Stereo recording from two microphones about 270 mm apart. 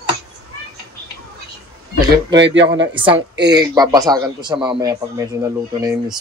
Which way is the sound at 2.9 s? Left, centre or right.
Centre.